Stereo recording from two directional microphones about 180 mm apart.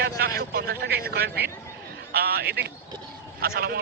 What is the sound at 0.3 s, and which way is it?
Speech, 60° right (ahead or behind).